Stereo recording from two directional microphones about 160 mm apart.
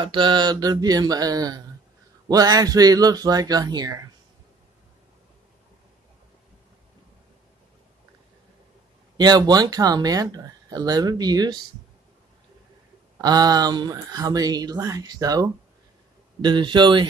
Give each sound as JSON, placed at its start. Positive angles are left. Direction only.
{"t": 0.0, "sound": "speech", "side_deg": -30}
{"t": 9.1, "sound": "speech", "side_deg": -25}
{"t": 13.2, "sound": "speech", "side_deg": -25}